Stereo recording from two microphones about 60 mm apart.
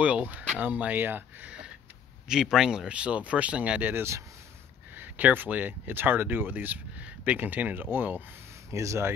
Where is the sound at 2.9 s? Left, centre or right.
Centre.